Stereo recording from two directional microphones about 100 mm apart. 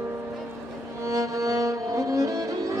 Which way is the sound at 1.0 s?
35° right (ahead or behind).